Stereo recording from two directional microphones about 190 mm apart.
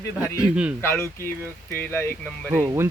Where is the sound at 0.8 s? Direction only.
15° left (ahead or behind).